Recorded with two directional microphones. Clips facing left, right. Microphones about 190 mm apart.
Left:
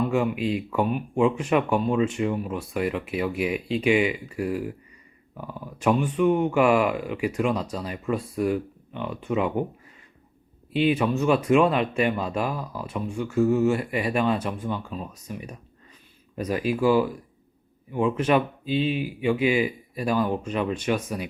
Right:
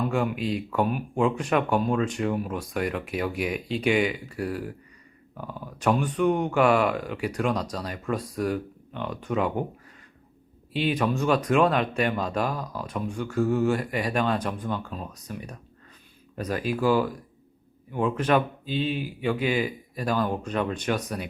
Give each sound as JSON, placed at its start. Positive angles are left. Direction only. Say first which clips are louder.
{"t": 0.3, "sound": "speech", "louder": "left 2 dB", "side_deg": -35}
{"t": 0.7, "sound": "speech", "louder": "left 1 dB", "side_deg": 0}
{"t": 10.7, "sound": "speech", "louder": "left 3 dB", "side_deg": 5}